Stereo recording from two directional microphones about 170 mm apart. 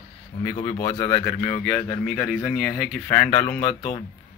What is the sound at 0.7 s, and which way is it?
Speech, 20° left (ahead or behind).